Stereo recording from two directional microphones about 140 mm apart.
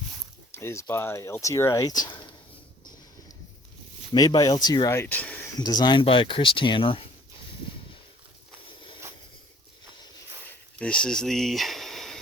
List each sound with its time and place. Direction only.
0.5 s speech: 20° left (ahead or behind)
4.1 s speech: 30° left (ahead or behind); by 5.5 s 10° left (ahead or behind)
5.5 s speech: 30° left (ahead or behind)
10.8 s speech: 5° left (ahead or behind)